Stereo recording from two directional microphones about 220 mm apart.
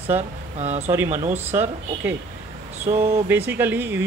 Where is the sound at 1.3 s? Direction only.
10° right (ahead or behind).